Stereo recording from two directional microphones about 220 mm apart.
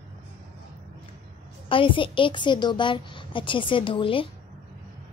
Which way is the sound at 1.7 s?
25° left (ahead or behind).